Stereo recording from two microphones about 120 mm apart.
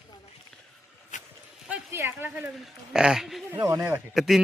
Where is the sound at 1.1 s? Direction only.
90° left.